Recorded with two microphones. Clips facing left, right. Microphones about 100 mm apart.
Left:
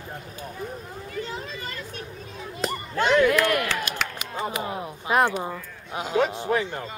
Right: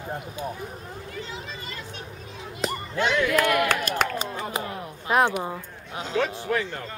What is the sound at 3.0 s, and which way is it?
Speech, 45° left (ahead or behind).